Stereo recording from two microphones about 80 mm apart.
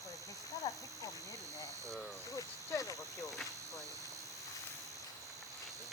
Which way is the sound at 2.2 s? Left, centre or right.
Left.